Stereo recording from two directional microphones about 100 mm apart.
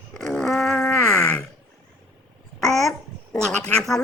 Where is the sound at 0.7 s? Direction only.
15° left (ahead or behind).